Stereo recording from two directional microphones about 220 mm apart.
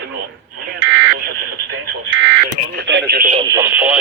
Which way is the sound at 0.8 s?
60° right (ahead or behind).